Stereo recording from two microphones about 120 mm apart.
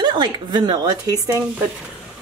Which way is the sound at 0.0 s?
40° right (ahead or behind).